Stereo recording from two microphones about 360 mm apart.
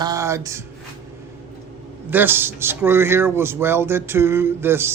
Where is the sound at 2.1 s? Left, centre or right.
Centre.